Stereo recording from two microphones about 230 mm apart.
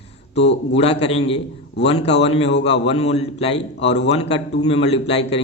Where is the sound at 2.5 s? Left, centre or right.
Left.